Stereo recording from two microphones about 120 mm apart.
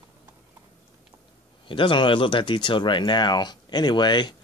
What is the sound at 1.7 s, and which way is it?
Speech, 45° left (ahead or behind).